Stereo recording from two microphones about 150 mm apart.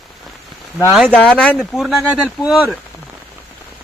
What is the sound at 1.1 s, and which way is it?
Speech, 5° left (ahead or behind).